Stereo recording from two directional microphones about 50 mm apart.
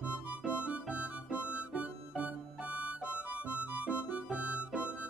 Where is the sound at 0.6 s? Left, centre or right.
Right.